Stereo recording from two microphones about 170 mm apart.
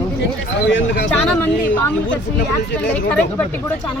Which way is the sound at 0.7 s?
90° left.